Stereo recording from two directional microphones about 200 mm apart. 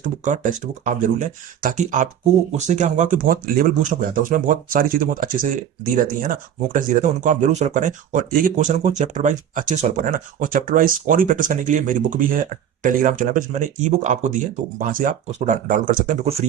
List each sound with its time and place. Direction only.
0.0 s speech: 40° right (ahead or behind)